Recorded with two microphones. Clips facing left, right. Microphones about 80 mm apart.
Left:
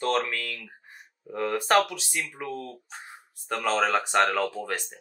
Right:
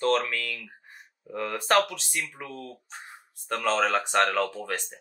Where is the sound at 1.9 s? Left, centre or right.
Centre.